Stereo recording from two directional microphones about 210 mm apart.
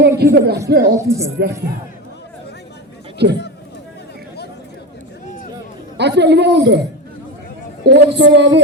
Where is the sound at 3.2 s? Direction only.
50° right (ahead or behind).